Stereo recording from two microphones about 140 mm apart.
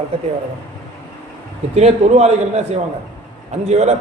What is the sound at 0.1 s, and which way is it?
Speech, 45° right (ahead or behind).